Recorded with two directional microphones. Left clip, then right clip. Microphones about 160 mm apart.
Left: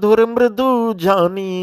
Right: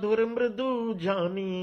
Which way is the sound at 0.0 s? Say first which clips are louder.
Left 13 dB; 50° left (ahead or behind).